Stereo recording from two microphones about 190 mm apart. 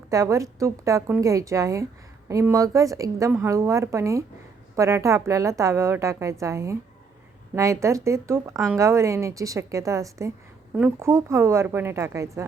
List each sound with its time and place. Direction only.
0.1 s a woman's voice: 15° right (ahead or behind)